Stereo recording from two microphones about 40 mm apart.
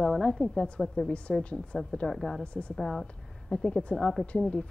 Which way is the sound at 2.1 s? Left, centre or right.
Centre.